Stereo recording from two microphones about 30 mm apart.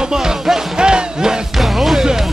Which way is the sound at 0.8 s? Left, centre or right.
Right.